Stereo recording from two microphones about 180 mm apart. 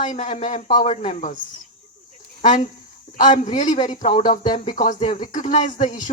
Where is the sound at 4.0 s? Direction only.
45° left (ahead or behind).